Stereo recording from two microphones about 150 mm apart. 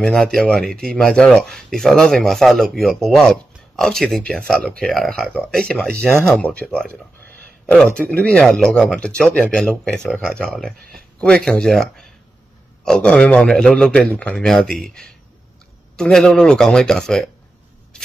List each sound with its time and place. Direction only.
0.0 s speech: 5° left (ahead or behind)